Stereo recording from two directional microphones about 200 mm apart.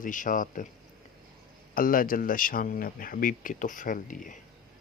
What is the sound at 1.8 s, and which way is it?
Speech, 45° left (ahead or behind).